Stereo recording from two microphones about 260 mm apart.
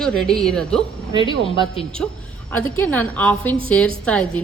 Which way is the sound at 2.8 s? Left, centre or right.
Centre.